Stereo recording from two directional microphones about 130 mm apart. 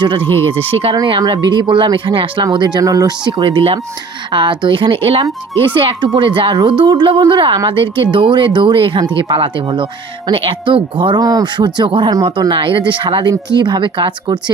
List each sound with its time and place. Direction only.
0.0 s a woman's voice: 40° right (ahead or behind)
0.9 s a woman's voice: 35° right (ahead or behind)
3.3 s a woman's voice: 45° right (ahead or behind)